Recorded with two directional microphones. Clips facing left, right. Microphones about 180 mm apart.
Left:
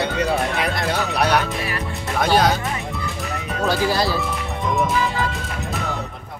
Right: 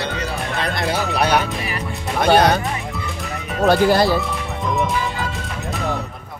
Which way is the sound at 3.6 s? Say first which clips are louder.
Right 6 dB; 55° right (ahead or behind).